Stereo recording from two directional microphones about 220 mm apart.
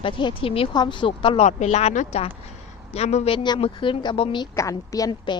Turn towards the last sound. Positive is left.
turn(degrees=20)  # may be behind; listen again after turning